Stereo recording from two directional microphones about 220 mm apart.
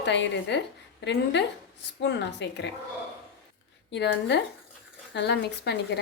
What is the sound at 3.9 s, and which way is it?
A woman's voice, 50° left (ahead or behind).